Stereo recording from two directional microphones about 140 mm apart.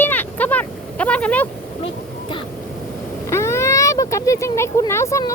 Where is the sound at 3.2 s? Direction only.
20° left (ahead or behind).